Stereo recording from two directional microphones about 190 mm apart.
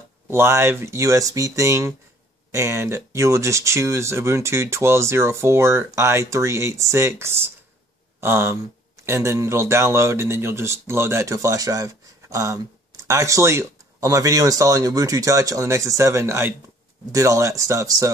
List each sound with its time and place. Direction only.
0.3 s speech: 15° right (ahead or behind)